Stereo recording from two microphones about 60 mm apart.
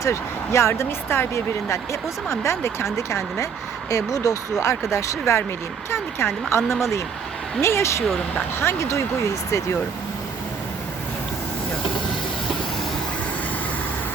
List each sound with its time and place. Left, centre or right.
0.0 s speech: left
3.8 s speech: left
4.9 s speech: left
5.9 s speech: left
7.6 s speech: left